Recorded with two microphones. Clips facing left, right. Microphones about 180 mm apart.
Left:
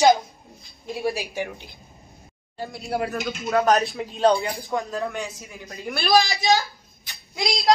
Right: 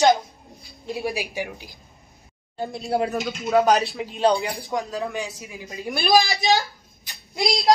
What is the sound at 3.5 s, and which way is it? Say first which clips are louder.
A woman's voice: right 1 dB; centre (ahead or behind).